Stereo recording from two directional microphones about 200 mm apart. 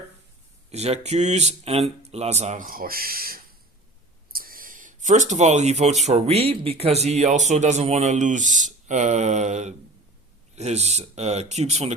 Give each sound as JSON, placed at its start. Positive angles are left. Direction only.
{"t": 0.7, "sound": "speech", "side_deg": -30}